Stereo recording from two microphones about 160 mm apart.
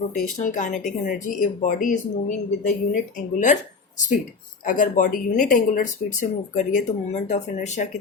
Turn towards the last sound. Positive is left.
turn(degrees=50)  # may be behind; listen again after turning